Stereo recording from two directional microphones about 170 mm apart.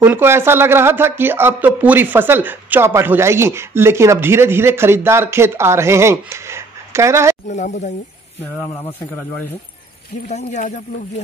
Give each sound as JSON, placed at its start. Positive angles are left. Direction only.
{"t": 0.0, "sound": "speech", "side_deg": -10}
{"t": 7.4, "sound": "speech", "side_deg": 45}
{"t": 10.2, "sound": "speech", "side_deg": 45}